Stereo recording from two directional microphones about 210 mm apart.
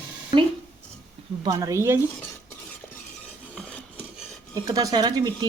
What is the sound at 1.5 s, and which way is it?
Speech, 15° right (ahead or behind).